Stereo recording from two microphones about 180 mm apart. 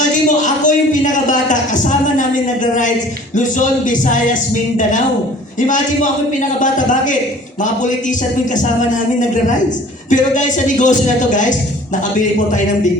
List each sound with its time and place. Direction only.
0.4 s a sound: 45° left (ahead or behind)
3.3 s speech: 45° left (ahead or behind)
5.5 s speech: 45° left (ahead or behind)
10.1 s speech: 45° left (ahead or behind)